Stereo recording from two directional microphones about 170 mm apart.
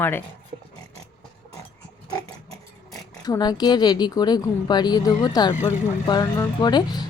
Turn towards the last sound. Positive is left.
turn(degrees=25)  # may be behind; listen again after turning